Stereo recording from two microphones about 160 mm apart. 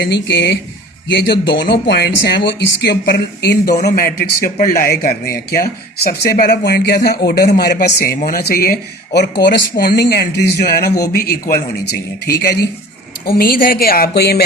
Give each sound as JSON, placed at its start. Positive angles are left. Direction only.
{"t": 0.0, "sound": "speech", "side_deg": 90}
{"t": 7.9, "sound": "speech", "side_deg": 65}
{"t": 13.2, "sound": "speech", "side_deg": 70}